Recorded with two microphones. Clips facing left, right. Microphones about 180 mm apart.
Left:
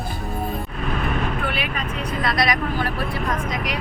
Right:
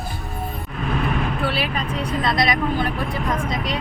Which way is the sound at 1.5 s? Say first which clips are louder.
Right 3 dB; 35° right (ahead or behind).